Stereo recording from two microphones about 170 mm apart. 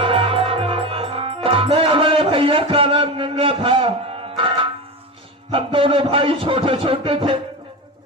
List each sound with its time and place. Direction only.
0.0 s music: 35° right (ahead or behind)
5.5 s speech: 30° right (ahead or behind)